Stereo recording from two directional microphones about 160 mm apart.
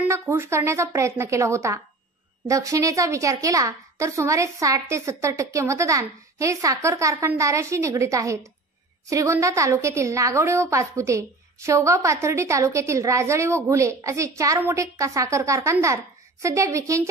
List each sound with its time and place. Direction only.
0.1 s a woman's voice: 15° right (ahead or behind)